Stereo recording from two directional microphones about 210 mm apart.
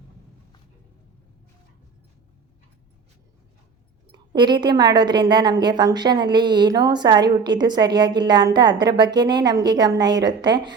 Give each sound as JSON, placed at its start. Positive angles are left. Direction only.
{"t": 4.3, "sound": "a woman's voice", "side_deg": -20}